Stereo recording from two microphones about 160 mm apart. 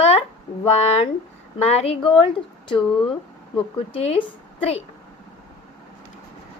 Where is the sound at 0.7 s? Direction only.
40° left (ahead or behind).